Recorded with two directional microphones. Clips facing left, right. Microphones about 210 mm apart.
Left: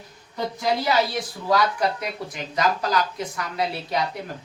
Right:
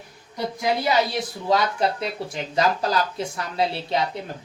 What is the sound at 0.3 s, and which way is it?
Speech, 15° right (ahead or behind).